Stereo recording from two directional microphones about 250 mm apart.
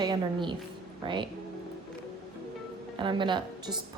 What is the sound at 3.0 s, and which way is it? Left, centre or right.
Speech, centre.